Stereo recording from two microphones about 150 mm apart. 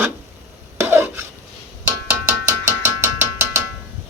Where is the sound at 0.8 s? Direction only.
15° right (ahead or behind).